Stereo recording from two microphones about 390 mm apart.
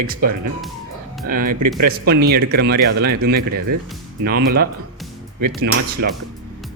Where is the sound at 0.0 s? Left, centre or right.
Right.